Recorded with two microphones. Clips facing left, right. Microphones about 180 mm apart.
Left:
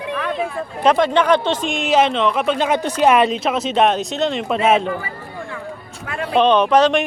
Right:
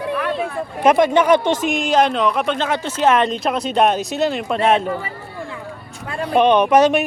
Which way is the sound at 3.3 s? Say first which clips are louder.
Left 1 dB; centre (ahead or behind).